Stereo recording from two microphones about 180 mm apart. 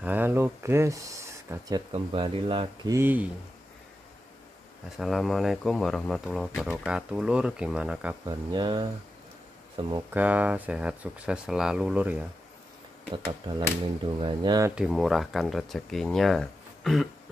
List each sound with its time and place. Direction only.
0.0 s speech: 10° right (ahead or behind)
1.9 s speech: 30° right (ahead or behind)
2.9 s speech: 10° right (ahead or behind)
4.8 s speech: centre (ahead or behind)
8.3 s speech: 25° right (ahead or behind)
10.1 s speech: 10° right (ahead or behind)
13.1 s speech: 30° right (ahead or behind)
14.8 s speech: centre (ahead or behind)